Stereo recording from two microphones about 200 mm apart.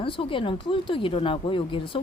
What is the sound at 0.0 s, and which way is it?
A woman's voice, 25° left (ahead or behind).